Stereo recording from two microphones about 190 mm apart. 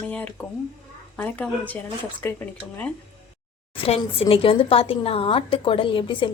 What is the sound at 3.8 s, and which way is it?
A woman's voice, 30° left (ahead or behind).